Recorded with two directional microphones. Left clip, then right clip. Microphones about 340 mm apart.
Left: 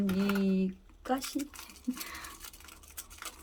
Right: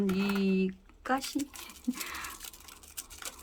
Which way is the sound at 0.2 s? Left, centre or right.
Centre.